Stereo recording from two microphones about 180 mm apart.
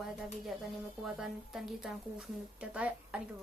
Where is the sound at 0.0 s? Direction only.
Centre (ahead or behind).